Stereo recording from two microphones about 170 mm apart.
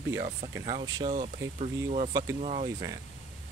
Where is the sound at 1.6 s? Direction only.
45° right (ahead or behind).